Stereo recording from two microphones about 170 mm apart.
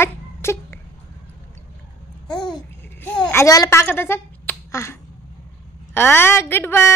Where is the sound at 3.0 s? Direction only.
10° left (ahead or behind).